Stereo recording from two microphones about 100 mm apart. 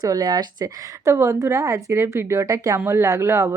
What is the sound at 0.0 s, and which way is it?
Speech, 40° right (ahead or behind).